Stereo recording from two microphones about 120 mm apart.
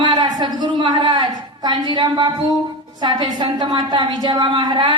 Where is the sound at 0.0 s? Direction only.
35° right (ahead or behind).